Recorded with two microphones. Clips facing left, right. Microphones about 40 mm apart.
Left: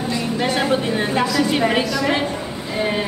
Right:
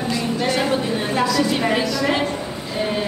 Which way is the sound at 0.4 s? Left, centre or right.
Centre.